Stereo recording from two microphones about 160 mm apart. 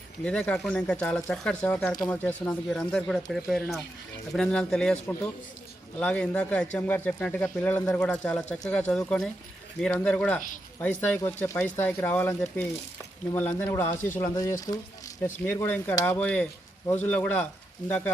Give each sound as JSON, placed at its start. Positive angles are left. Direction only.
{"t": 0.3, "sound": "speech", "side_deg": 5}
{"t": 6.0, "sound": "speech", "side_deg": 5}